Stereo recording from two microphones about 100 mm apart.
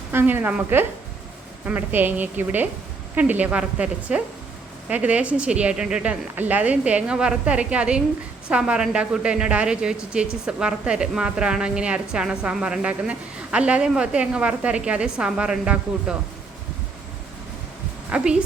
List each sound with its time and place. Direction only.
0.1 s speech: 20° right (ahead or behind)
18.1 s speech: 10° right (ahead or behind)